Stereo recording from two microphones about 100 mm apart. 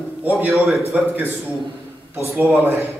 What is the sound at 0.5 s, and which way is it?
Speech, centre (ahead or behind).